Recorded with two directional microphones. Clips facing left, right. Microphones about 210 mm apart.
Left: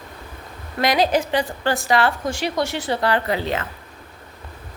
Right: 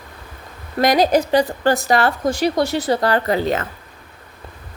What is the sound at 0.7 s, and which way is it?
A woman's voice, 45° right (ahead or behind).